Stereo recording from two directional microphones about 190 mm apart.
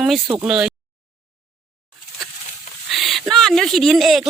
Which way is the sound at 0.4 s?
5° right (ahead or behind).